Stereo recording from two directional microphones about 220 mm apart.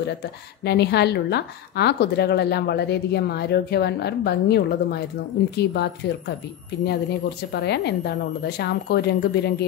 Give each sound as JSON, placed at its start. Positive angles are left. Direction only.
{"t": 0.7, "sound": "a woman's voice", "side_deg": 50}
{"t": 7.5, "sound": "a woman's voice", "side_deg": 50}